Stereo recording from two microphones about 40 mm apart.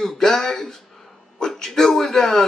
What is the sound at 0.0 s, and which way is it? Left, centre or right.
Speech, centre.